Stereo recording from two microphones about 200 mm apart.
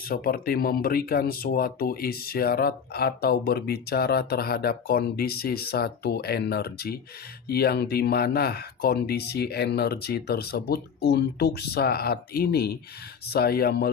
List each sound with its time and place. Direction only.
0.0 s speech: 45° left (ahead or behind)